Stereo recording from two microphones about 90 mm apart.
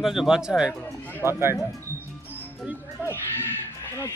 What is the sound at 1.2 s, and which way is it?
Speech, 30° right (ahead or behind).